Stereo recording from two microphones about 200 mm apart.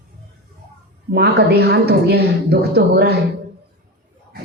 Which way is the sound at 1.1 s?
55° right (ahead or behind).